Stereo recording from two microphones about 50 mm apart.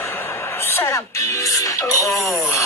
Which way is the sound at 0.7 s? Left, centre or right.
Left.